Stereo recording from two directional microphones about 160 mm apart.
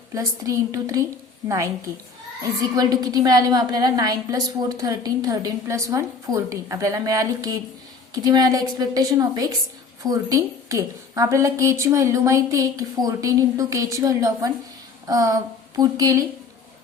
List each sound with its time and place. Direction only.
0.1 s a woman's voice: 20° right (ahead or behind)